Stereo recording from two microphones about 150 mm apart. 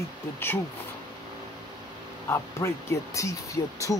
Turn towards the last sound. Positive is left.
turn(degrees=20)  # may be behind; listen again after turning